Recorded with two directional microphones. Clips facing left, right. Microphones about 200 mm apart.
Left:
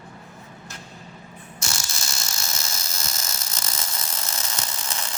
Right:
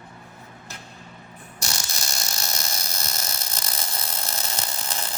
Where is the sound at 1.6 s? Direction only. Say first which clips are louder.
Right 1 dB; 35° right (ahead or behind).